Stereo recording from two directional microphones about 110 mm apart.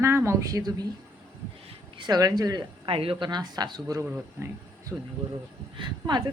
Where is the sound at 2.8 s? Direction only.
55° right (ahead or behind); by 4.0 s 40° right (ahead or behind).